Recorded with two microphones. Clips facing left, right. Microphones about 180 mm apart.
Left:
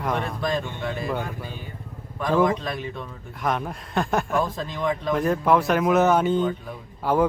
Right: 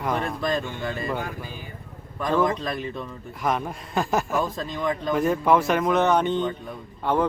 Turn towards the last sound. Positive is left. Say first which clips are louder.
# left 2 dB
turn(degrees=5)  # may be behind; listen again after turning